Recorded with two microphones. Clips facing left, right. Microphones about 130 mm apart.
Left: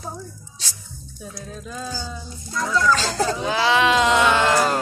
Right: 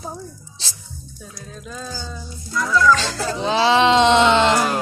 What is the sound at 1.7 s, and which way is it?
Music, 5° left (ahead or behind).